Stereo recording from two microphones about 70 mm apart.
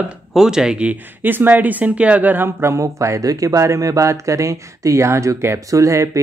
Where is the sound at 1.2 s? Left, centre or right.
Right.